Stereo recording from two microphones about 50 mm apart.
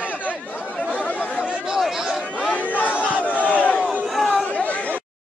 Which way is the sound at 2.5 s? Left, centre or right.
Left.